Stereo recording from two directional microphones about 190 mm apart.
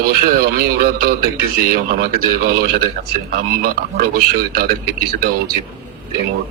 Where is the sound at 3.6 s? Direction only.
50° right (ahead or behind).